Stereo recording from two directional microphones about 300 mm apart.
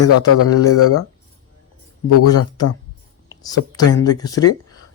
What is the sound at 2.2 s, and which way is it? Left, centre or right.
Speech, left.